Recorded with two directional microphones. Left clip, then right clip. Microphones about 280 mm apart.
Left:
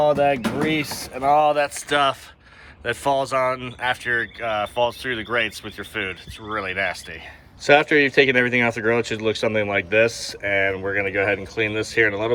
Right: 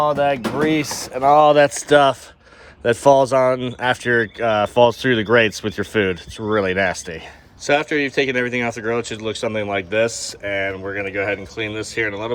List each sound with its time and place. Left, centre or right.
0.0 s speech: centre
7.6 s speech: centre